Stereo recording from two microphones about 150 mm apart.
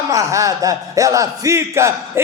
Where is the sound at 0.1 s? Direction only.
20° right (ahead or behind).